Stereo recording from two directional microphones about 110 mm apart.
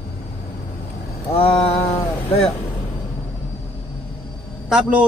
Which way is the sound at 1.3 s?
65° left (ahead or behind).